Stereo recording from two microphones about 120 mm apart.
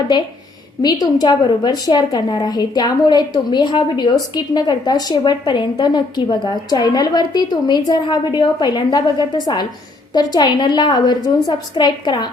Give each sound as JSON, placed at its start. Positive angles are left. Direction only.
{"t": 0.8, "sound": "a woman's voice", "side_deg": 35}